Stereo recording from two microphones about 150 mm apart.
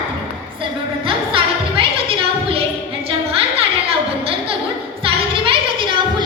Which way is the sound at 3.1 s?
40° right (ahead or behind).